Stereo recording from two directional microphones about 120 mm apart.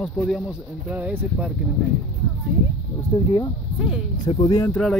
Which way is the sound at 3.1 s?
35° left (ahead or behind).